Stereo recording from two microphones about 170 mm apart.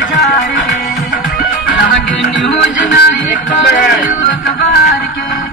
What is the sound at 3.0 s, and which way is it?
Music, 90° left.